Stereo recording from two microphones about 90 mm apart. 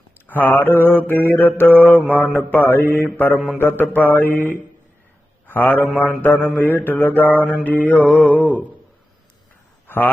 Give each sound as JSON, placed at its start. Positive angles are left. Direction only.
{"t": 0.3, "sound": "mantra", "side_deg": 20}
{"t": 3.3, "sound": "mantra", "side_deg": -5}
{"t": 3.6, "sound": "mantra", "side_deg": 25}
{"t": 5.5, "sound": "a man's voice", "side_deg": 20}
{"t": 6.0, "sound": "mantra", "side_deg": 20}
{"t": 9.8, "sound": "a sound", "side_deg": 20}